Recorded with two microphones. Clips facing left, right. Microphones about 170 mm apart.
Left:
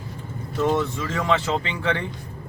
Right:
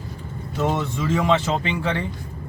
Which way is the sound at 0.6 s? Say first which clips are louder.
Left 1 dB; 10° right (ahead or behind).